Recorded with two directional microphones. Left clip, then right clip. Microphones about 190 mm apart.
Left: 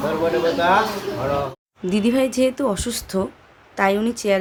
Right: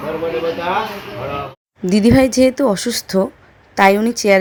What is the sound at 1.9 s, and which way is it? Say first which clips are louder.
A woman's voice: right 7 dB; 30° right (ahead or behind).